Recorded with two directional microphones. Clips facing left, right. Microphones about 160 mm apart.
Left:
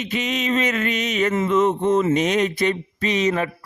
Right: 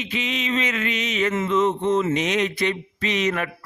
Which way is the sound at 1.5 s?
50° left (ahead or behind).